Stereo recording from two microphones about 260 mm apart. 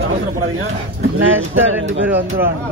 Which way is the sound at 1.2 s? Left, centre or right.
Right.